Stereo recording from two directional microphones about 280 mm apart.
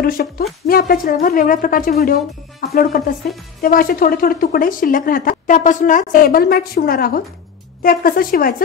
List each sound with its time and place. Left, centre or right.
0.0 s speech: left